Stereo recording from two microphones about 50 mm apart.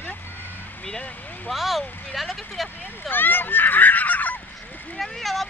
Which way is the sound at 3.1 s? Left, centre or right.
Left.